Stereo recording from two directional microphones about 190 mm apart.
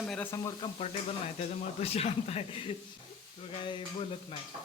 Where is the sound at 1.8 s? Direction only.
30° left (ahead or behind).